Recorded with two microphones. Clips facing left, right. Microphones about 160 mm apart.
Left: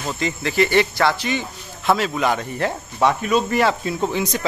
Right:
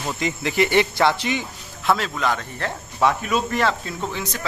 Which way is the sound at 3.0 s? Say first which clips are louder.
Left 2 dB; centre (ahead or behind).